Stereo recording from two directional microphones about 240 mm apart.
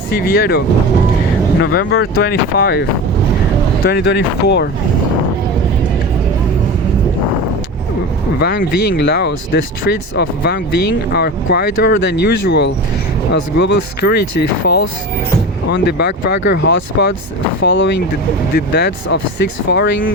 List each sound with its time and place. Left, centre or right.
0.2 s speech: left
1.6 s speech: left
3.8 s speech: left
8.4 s speech: left